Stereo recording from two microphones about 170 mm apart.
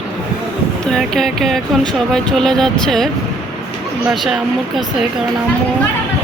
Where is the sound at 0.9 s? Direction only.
Centre (ahead or behind).